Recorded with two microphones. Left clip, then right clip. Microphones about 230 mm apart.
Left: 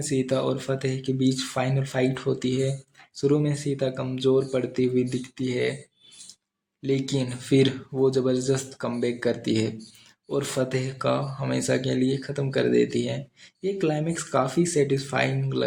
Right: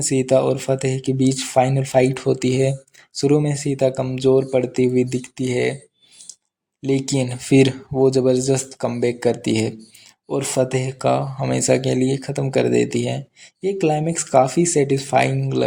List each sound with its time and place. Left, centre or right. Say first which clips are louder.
0.0 s speech: right 8 dB; right
6.8 s speech: right 5 dB; right